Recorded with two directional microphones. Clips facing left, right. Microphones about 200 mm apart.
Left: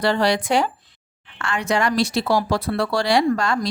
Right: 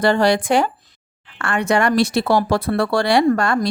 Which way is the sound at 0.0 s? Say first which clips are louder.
Right 4 dB; 50° right (ahead or behind).